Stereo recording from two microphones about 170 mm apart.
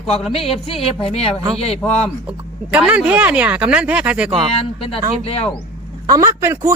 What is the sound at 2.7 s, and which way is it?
Speech, 10° right (ahead or behind).